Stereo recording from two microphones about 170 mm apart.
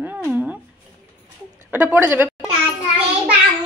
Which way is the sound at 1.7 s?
10° right (ahead or behind).